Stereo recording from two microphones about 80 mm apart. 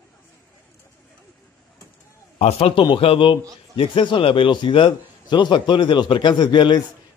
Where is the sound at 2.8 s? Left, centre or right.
Left.